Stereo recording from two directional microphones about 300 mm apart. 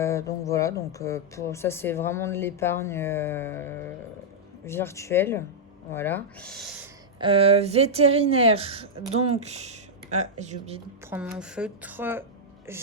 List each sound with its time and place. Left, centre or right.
0.0 s speech: centre
7.2 s a woman's voice: centre
11.1 s speech: centre